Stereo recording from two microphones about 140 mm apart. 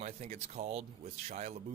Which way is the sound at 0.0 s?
55° right (ahead or behind).